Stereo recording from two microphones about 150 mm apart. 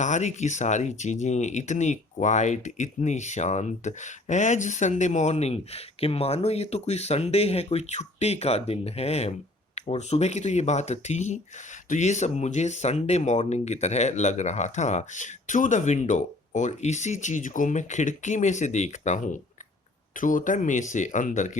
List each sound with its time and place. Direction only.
0.0 s speech: 50° left (ahead or behind)